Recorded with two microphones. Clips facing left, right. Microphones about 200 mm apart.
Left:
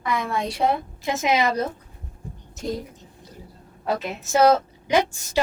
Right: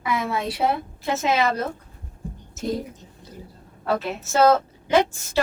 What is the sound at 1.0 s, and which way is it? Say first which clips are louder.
Speech: even; 15° left (ahead or behind).